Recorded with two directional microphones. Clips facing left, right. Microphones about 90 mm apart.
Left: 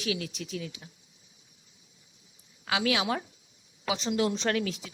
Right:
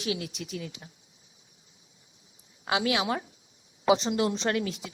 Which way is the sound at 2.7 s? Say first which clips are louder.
Right 1 dB; 35° right (ahead or behind).